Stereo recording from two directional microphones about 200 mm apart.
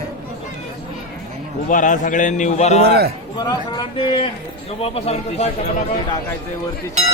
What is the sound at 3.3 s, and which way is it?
A man's voice, 20° left (ahead or behind).